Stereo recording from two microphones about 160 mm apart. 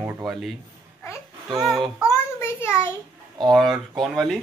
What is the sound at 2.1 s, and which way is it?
Child singing, 15° left (ahead or behind).